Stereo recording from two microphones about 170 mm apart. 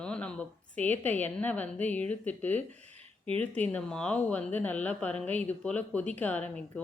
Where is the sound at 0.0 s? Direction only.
5° left (ahead or behind).